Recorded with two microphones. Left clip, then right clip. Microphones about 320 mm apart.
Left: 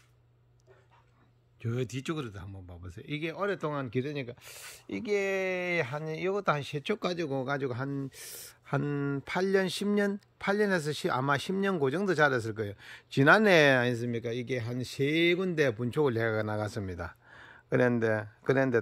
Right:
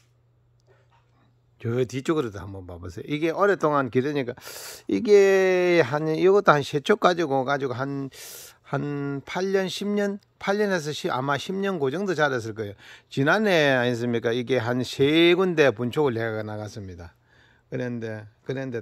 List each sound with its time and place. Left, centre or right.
1.6 s speech: centre